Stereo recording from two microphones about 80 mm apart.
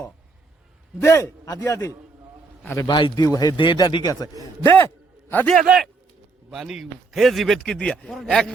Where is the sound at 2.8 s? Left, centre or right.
Left.